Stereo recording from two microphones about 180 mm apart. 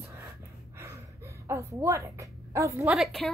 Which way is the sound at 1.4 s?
15° right (ahead or behind).